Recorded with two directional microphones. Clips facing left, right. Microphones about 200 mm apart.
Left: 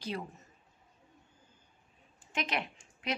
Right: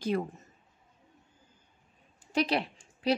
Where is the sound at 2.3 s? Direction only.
35° right (ahead or behind).